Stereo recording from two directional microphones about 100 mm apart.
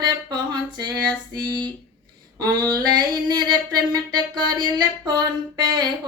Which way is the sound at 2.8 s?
45° right (ahead or behind).